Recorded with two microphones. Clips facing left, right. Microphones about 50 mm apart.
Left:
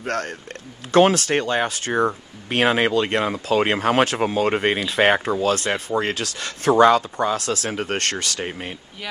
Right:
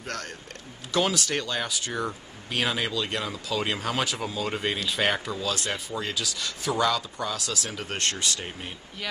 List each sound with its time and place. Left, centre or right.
0.0 s speech: left
8.5 s speech: left